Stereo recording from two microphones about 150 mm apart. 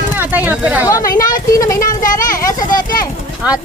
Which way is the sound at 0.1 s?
10° right (ahead or behind).